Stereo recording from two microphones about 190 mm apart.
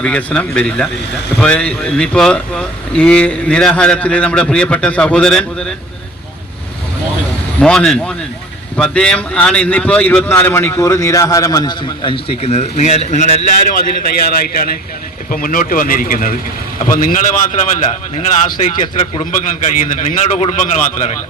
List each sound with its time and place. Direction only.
0.0 s speech: 5° left (ahead or behind)
7.6 s a man's voice: 5° left (ahead or behind); by 21.1 s 40° left (ahead or behind)